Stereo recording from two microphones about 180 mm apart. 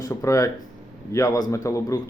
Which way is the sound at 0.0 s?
20° left (ahead or behind).